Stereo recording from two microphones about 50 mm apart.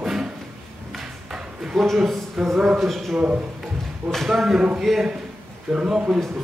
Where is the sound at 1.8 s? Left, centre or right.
Centre.